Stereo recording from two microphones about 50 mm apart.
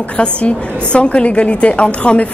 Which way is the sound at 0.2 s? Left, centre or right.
Left.